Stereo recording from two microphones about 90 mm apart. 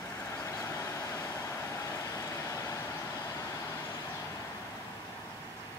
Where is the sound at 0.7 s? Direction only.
35° left (ahead or behind).